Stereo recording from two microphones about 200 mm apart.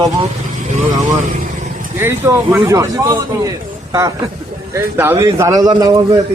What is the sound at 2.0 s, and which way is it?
Speech, 10° right (ahead or behind).